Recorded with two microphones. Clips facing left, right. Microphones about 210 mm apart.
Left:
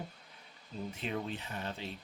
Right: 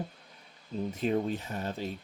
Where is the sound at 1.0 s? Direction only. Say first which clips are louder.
Right 9 dB; 40° right (ahead or behind).